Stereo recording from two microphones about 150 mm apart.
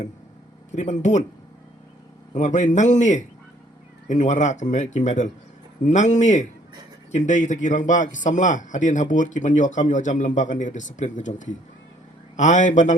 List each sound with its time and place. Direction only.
0.8 s speech: 50° left (ahead or behind)
2.3 s a man's voice: 55° left (ahead or behind)